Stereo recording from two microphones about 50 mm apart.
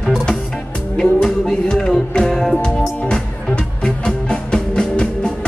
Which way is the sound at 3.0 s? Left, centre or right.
Centre.